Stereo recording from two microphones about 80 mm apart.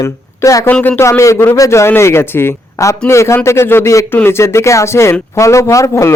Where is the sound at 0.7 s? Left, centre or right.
Left.